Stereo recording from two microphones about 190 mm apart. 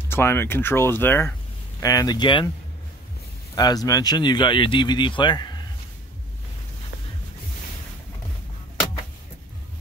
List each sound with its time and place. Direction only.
0.1 s speech: 10° left (ahead or behind)
3.5 s speech: 20° left (ahead or behind)